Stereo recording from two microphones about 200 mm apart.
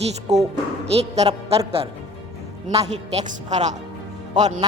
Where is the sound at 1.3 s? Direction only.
30° right (ahead or behind).